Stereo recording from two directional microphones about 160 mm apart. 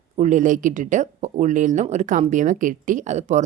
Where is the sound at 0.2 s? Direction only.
50° right (ahead or behind).